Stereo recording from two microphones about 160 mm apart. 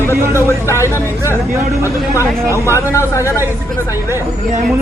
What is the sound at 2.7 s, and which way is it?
Speech, 15° left (ahead or behind).